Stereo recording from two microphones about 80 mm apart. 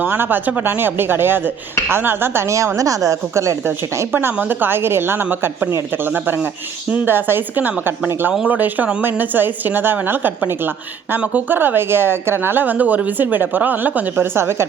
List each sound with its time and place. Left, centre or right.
0.0 s speech: right
3.7 s speech: right